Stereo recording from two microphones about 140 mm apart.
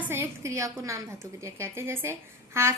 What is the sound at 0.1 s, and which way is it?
A woman's voice, 20° right (ahead or behind).